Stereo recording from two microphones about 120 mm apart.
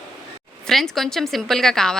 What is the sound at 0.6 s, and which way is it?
A woman's voice, 5° left (ahead or behind).